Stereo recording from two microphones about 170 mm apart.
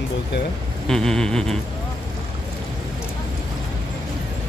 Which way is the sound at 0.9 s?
5° left (ahead or behind).